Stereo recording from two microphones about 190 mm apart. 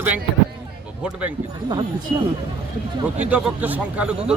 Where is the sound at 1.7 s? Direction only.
25° right (ahead or behind).